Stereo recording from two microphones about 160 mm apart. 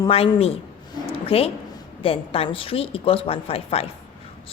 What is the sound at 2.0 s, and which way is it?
A woman's voice, 35° left (ahead or behind).